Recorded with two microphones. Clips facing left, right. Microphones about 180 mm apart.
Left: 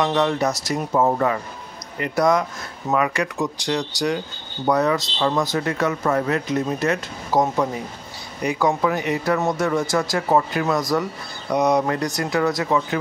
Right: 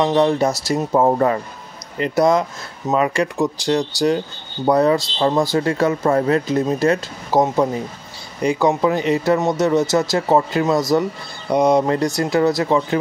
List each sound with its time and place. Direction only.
0.0 s speech: 25° right (ahead or behind)